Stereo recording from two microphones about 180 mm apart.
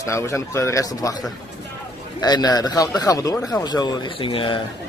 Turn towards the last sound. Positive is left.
turn(degrees=30)  # may be behind; listen again after turning